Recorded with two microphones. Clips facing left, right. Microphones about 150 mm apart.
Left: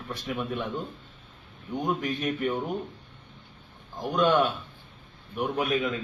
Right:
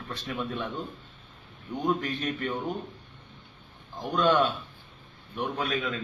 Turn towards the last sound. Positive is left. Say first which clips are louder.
# left 3 dB
turn(degrees=20)  # may be behind; listen again after turning